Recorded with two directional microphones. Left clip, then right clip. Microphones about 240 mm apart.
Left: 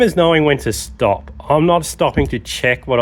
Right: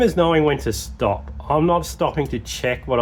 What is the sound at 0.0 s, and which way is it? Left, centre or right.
Speech, left.